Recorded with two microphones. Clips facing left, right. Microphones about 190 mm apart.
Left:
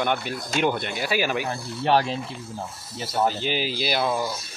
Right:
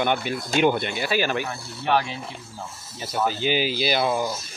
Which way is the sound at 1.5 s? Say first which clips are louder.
Left 2 dB; 30° left (ahead or behind).